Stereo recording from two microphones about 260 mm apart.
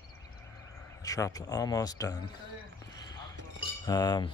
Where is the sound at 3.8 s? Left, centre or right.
Centre.